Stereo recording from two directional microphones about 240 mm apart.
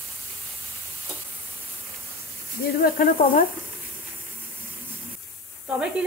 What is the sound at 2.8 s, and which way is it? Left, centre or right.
Speech, left.